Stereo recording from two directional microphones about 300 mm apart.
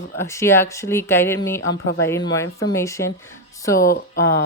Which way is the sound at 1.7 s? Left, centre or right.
Left.